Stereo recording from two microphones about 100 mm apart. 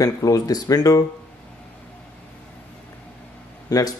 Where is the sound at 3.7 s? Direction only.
40° left (ahead or behind).